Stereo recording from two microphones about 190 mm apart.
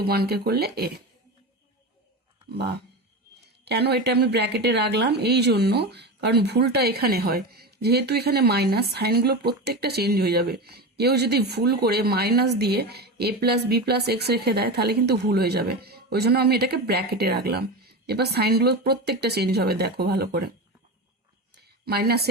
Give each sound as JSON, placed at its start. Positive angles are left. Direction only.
{"t": 0.0, "sound": "a woman's voice", "side_deg": -55}
{"t": 2.5, "sound": "a woman's voice", "side_deg": -60}
{"t": 21.8, "sound": "a woman's voice", "side_deg": -55}